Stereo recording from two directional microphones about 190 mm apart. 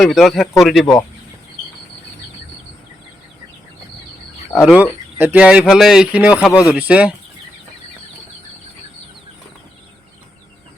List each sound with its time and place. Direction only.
0.0 s speech: centre (ahead or behind)
4.5 s speech: 5° right (ahead or behind)